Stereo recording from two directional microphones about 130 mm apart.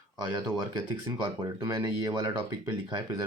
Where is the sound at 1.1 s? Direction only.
25° right (ahead or behind).